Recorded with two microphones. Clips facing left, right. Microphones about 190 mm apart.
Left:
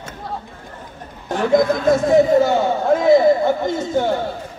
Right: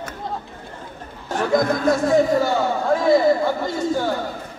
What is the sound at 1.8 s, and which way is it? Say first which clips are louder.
Speech: left 3 dB; 20° left (ahead or behind).